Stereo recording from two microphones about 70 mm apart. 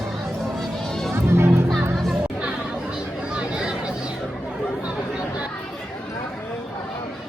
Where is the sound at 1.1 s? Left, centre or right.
Right.